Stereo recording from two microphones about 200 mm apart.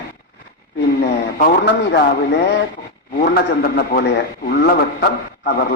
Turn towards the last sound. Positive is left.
turn(degrees=55)  # may be behind; listen again after turning